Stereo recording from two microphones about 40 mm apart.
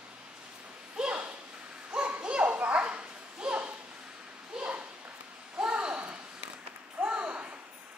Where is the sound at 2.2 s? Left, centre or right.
Right.